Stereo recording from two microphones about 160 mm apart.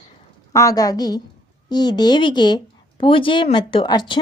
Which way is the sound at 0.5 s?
20° left (ahead or behind).